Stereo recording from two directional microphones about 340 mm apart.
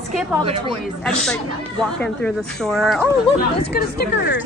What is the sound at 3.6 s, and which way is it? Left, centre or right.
Speech, left.